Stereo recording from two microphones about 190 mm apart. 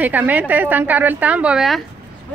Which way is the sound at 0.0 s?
10° right (ahead or behind).